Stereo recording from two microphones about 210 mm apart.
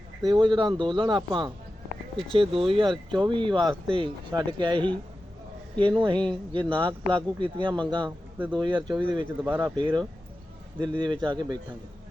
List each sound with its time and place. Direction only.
0.3 s speech: 20° right (ahead or behind)
9.2 s speech: 10° right (ahead or behind)
9.7 s speech: 20° right (ahead or behind)